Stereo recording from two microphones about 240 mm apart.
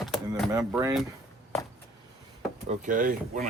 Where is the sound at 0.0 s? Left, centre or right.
Centre.